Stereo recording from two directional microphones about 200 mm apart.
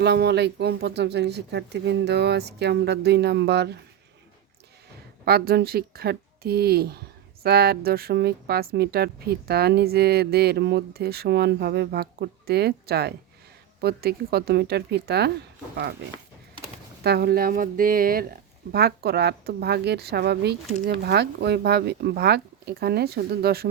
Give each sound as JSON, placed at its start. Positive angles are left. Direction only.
{"t": 0.0, "sound": "speech", "side_deg": -55}
{"t": 5.2, "sound": "speech", "side_deg": -50}
{"t": 17.0, "sound": "speech", "side_deg": -55}